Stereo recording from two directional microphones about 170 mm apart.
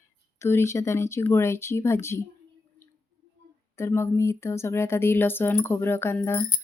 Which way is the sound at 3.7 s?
15° left (ahead or behind).